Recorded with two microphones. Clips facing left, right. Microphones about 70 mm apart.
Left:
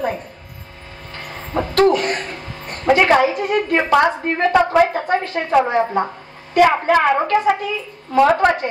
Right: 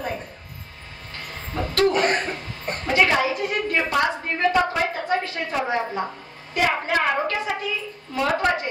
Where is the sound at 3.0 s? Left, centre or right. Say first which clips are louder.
Left 3 dB; left.